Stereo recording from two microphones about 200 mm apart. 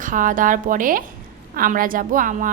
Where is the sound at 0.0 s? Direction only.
40° right (ahead or behind).